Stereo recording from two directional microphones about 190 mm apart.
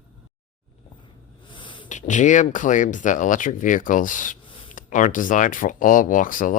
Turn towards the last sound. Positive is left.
turn(degrees=45)  # may be behind; listen again after turning